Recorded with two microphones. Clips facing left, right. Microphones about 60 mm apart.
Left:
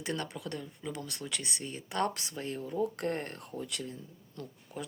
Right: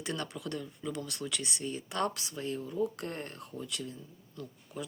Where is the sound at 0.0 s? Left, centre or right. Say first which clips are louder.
Left 1 dB; left.